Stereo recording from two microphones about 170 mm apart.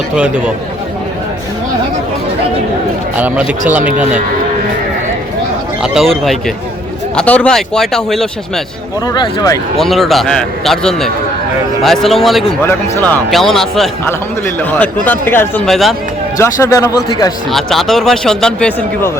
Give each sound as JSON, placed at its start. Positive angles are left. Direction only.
{"t": 3.2, "sound": "a man's voice", "side_deg": -10}
{"t": 5.8, "sound": "speech", "side_deg": 0}
{"t": 9.1, "sound": "speech", "side_deg": 25}
{"t": 9.7, "sound": "speech", "side_deg": 0}
{"t": 12.6, "sound": "a man's voice", "side_deg": 10}
{"t": 16.4, "sound": "speech", "side_deg": 20}
{"t": 17.5, "sound": "speech", "side_deg": 0}